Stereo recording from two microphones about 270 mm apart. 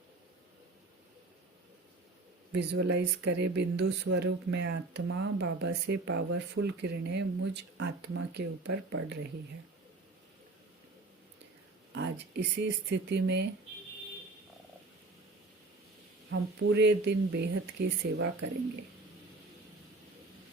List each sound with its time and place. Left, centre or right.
2.5 s speech: right
11.9 s speech: right
16.3 s speech: right